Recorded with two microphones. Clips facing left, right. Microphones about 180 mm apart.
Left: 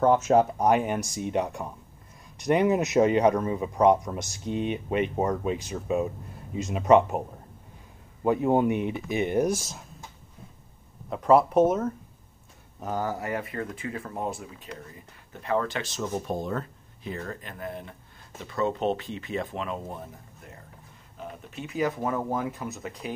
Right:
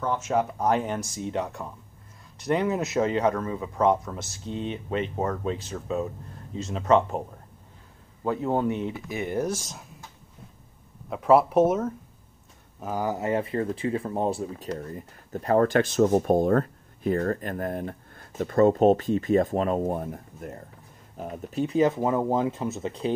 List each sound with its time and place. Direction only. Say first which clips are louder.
0.6 s speech: left 2 dB; 15° left (ahead or behind)
11.1 s speech: right 1 dB; 5° right (ahead or behind); by 20.5 s 50° right (ahead or behind)
21.2 s speech: right 9 dB; 35° right (ahead or behind)